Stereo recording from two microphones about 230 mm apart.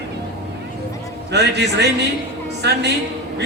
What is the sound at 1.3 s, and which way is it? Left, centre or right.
Speech, right.